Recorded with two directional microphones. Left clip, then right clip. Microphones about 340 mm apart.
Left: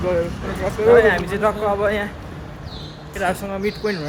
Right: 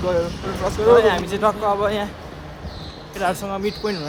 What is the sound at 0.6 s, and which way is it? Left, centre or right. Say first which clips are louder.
Speech: left 1 dB; centre.